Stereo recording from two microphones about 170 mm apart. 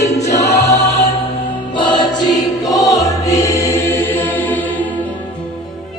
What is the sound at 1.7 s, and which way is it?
Music, 25° left (ahead or behind).